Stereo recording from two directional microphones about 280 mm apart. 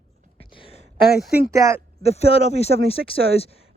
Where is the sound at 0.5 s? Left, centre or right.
Centre.